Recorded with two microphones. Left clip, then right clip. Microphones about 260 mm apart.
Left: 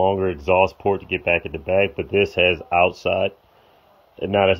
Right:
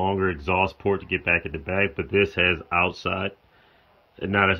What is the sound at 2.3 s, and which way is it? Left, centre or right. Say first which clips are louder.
Speech: left 4 dB; centre.